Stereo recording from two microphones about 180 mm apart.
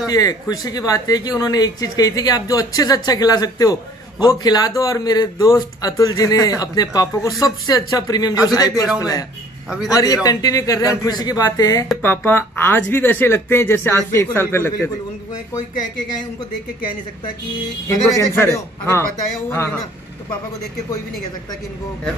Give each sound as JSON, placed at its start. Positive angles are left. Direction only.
{"t": 0.1, "sound": "speech", "side_deg": 20}
{"t": 9.8, "sound": "speech", "side_deg": 20}
{"t": 17.8, "sound": "speech", "side_deg": 15}